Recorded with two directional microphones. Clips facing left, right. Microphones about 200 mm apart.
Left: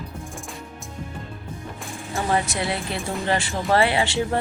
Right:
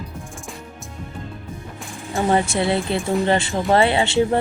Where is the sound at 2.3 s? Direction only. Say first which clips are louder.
Right 5 dB; 25° right (ahead or behind).